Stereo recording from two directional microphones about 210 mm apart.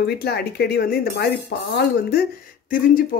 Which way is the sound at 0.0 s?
50° left (ahead or behind).